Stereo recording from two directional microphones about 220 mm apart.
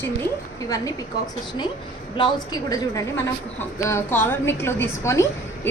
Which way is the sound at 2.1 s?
20° left (ahead or behind).